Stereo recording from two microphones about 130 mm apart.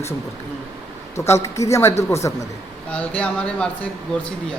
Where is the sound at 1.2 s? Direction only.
20° left (ahead or behind).